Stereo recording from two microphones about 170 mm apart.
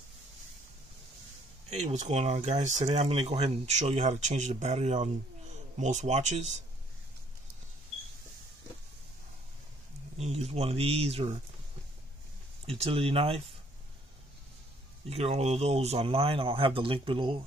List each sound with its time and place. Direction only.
1.7 s speech: 40° right (ahead or behind)
10.1 s speech: 40° right (ahead or behind)
12.6 s speech: 35° right (ahead or behind)
15.0 s speech: 35° right (ahead or behind)